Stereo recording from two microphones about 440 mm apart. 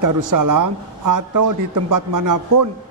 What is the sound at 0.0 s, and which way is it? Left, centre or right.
Speech, right.